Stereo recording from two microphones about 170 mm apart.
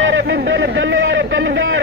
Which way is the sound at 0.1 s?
85° right.